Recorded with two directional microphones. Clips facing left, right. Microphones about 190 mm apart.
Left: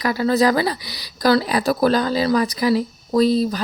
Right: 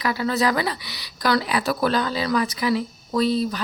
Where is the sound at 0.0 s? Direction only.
40° left (ahead or behind).